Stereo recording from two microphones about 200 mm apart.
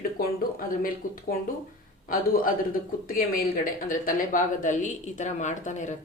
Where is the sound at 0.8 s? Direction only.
45° left (ahead or behind).